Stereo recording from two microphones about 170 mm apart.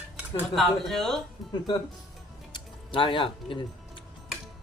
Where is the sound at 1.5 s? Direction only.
25° left (ahead or behind).